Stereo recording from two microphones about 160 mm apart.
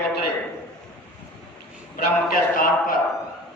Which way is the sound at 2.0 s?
65° left (ahead or behind).